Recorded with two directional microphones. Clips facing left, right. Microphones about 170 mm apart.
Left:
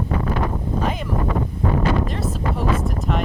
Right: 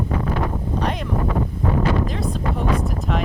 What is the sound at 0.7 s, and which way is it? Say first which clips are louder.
Wind noise: even; centre (ahead or behind).